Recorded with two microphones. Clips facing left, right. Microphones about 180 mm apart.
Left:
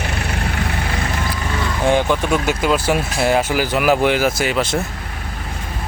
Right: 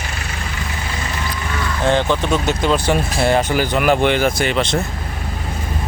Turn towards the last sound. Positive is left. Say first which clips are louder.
# right 1 dB
turn(degrees=5)  # may be behind; listen again after turning